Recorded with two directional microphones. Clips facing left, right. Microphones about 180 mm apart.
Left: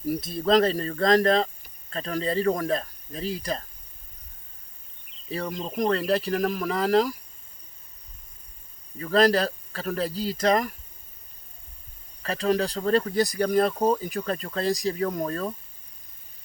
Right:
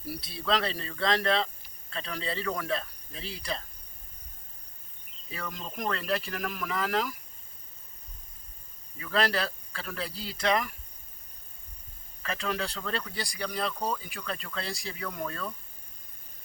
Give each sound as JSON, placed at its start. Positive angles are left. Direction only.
{"t": 0.0, "sound": "speech", "side_deg": 45}
{"t": 5.3, "sound": "speech", "side_deg": 40}
{"t": 9.0, "sound": "speech", "side_deg": 40}
{"t": 12.2, "sound": "speech", "side_deg": 35}